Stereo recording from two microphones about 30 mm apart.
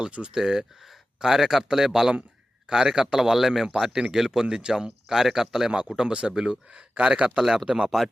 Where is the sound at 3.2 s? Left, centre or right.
Centre.